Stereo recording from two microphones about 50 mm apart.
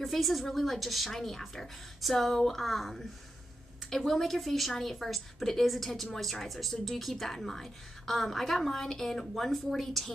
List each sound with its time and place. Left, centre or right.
0.0 s a woman's voice: centre